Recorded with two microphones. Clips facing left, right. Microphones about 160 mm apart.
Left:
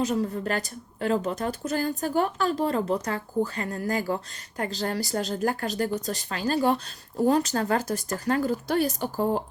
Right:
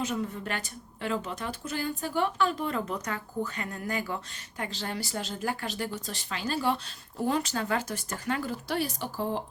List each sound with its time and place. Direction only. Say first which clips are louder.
0.0 s speech: left 6 dB; 35° left (ahead or behind)